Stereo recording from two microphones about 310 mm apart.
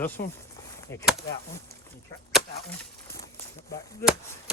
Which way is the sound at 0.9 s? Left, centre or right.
Centre.